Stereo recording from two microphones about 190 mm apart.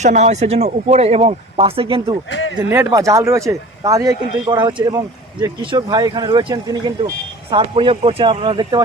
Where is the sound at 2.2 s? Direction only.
70° left (ahead or behind).